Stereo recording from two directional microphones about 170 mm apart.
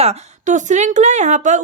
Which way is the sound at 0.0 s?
40° right (ahead or behind).